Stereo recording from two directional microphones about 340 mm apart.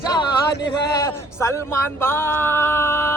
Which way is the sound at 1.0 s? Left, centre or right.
Centre.